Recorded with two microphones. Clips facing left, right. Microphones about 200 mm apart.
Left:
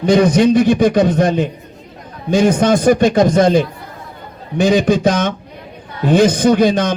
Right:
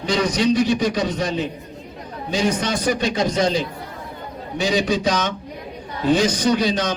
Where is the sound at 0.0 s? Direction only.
50° left (ahead or behind).